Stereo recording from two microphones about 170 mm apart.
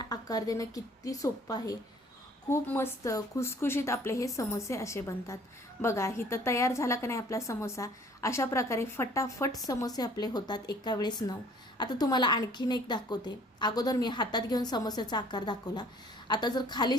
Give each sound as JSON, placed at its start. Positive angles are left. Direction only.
{"t": 0.0, "sound": "a woman's voice", "side_deg": 20}